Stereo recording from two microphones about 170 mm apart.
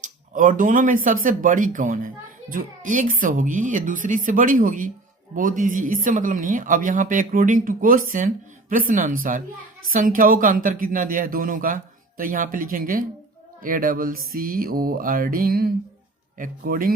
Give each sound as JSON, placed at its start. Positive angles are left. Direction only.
{"t": 0.0, "sound": "speech", "side_deg": -50}
{"t": 13.6, "sound": "music", "side_deg": -55}